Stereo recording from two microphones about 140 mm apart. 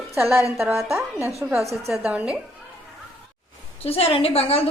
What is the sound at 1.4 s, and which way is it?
Speech, 20° right (ahead or behind).